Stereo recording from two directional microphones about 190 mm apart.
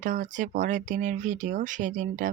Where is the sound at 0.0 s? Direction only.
40° right (ahead or behind).